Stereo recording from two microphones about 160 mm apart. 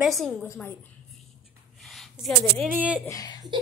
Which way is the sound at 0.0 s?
Centre (ahead or behind).